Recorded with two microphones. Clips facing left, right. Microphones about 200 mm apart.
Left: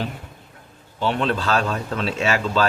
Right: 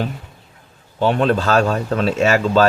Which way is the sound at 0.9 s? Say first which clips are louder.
Right 6 dB; 50° right (ahead or behind).